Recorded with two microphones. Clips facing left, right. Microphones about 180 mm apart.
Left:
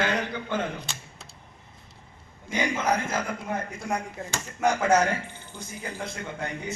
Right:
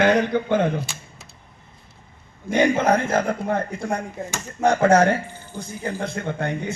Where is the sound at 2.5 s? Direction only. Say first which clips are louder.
Right 8 dB; 55° right (ahead or behind).